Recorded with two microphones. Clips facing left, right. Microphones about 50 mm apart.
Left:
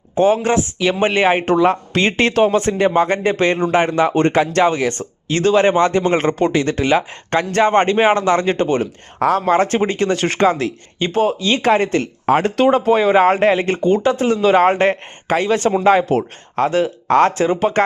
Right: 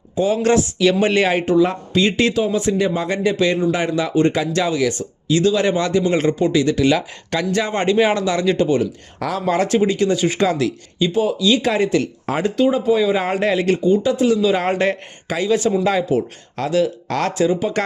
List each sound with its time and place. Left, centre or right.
0.3 s speech: left
1.5 s speech: left
10.4 s speech: left
11.1 s speech: left
12.5 s speech: left
13.8 s speech: left